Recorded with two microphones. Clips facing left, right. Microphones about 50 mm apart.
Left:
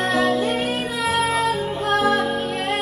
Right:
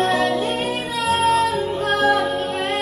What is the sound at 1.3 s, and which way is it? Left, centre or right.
Music, left.